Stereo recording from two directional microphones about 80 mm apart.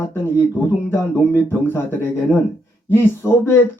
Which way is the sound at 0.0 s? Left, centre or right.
Left.